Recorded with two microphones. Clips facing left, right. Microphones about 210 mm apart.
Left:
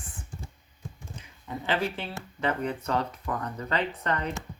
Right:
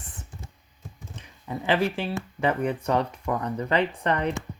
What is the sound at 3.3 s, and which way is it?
Speech, 25° right (ahead or behind).